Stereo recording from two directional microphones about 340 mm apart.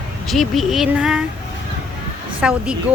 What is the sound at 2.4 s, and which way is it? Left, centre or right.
Speech, centre.